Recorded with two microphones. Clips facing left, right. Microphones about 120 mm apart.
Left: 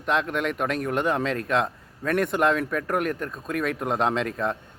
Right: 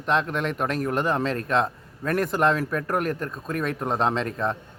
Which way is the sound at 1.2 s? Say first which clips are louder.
Even; 35° right (ahead or behind).